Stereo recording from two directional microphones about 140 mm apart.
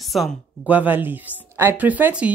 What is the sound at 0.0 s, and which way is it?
Speech, centre (ahead or behind).